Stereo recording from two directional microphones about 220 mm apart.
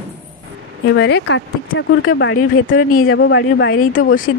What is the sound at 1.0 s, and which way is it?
Speech, 50° left (ahead or behind).